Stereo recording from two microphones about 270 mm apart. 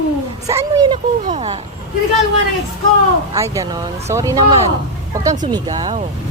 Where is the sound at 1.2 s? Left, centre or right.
Right.